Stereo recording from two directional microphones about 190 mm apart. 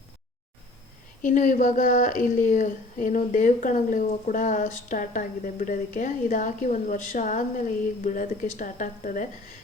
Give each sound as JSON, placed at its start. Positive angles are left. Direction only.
{"t": 1.2, "sound": "a woman's voice", "side_deg": 45}